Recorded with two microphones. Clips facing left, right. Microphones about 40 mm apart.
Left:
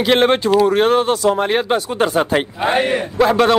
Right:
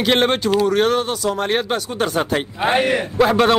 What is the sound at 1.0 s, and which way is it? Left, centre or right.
Speech, left.